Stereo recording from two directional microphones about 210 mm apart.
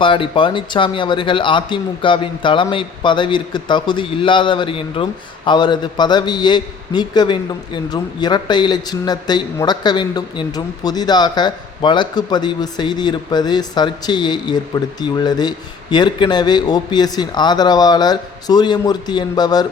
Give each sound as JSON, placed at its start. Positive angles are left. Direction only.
{"t": 0.0, "sound": "a man's voice", "side_deg": 25}